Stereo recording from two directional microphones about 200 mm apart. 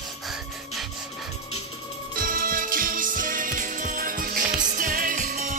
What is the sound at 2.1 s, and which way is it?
Music, 45° right (ahead or behind).